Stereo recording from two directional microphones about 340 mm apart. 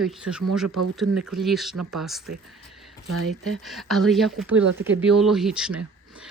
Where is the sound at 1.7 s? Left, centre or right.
Right.